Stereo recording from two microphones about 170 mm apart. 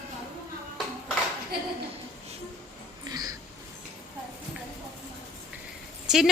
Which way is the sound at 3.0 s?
20° right (ahead or behind).